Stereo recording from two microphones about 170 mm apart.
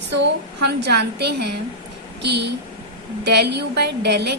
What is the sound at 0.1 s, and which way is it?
A woman's voice, 85° right.